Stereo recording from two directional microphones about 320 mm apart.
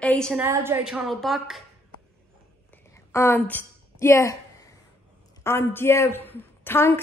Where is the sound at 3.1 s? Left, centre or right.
Centre.